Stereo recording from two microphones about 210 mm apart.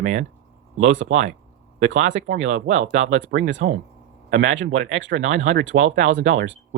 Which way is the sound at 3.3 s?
60° right (ahead or behind).